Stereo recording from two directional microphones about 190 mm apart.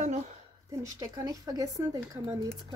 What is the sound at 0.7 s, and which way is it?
Speech, 15° right (ahead or behind).